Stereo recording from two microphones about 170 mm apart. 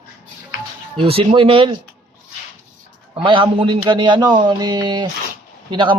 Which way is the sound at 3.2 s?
30° right (ahead or behind).